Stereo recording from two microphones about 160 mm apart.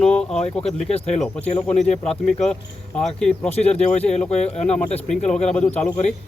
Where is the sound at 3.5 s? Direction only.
40° left (ahead or behind).